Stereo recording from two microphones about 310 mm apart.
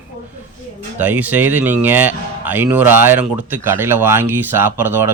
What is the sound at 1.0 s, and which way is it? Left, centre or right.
Speech, centre.